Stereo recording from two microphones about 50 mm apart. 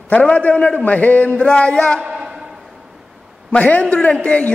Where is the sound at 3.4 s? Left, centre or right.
Left.